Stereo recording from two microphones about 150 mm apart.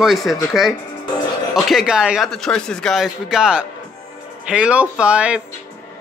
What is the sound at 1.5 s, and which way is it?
A man's voice, centre (ahead or behind).